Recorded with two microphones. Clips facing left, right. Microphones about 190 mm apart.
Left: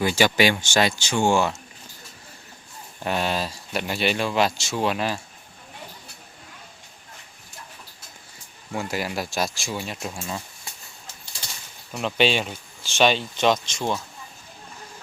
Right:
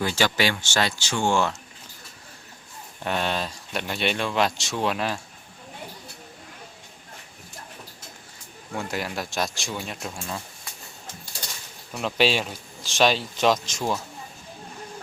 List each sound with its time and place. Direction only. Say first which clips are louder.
0.0 s speech: left 4 dB; 10° left (ahead or behind)
3.0 s speech: left 2 dB; 5° left (ahead or behind)
8.7 s speech: left 2 dB; 5° left (ahead or behind)
11.9 s speech: left 1 dB; centre (ahead or behind)